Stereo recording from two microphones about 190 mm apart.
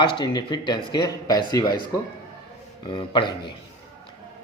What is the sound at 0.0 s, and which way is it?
Speech, 25° left (ahead or behind).